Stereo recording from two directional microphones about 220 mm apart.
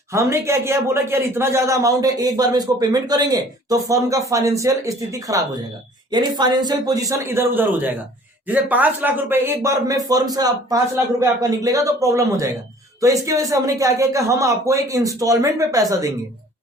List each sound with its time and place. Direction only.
0.1 s a man's voice: 15° right (ahead or behind)